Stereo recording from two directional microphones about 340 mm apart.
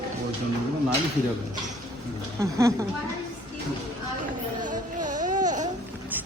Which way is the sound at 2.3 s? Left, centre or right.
Centre.